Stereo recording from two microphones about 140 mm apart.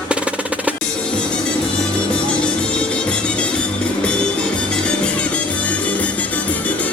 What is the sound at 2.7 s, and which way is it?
Music, 5° left (ahead or behind).